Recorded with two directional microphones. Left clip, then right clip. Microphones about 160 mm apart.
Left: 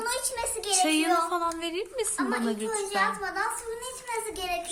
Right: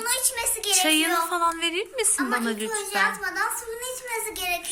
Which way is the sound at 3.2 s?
35° left (ahead or behind).